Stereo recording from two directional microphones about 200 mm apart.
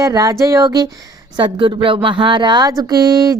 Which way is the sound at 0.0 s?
15° right (ahead or behind).